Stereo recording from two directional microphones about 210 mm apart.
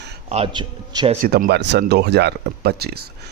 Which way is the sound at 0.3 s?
25° right (ahead or behind).